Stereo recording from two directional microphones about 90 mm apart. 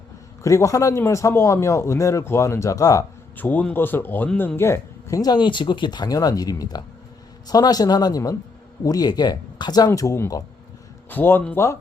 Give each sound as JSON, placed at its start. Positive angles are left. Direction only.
{"t": 0.4, "sound": "speech", "side_deg": 35}
{"t": 3.3, "sound": "a man's voice", "side_deg": 20}
{"t": 5.2, "sound": "speech", "side_deg": 55}
{"t": 11.1, "sound": "a man's voice", "side_deg": 25}